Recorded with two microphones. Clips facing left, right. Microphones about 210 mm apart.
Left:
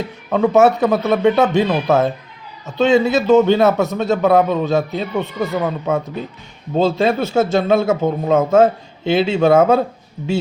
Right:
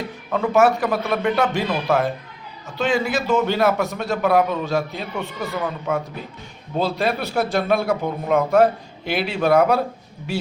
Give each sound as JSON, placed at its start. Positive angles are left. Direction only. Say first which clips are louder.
{"t": 0.3, "sound": "a man's voice", "louder": "left 5 dB", "side_deg": 25}
{"t": 5.4, "sound": "speech", "louder": "left 5 dB", "side_deg": 40}
{"t": 6.7, "sound": "a man's voice", "louder": "left 6 dB", "side_deg": 25}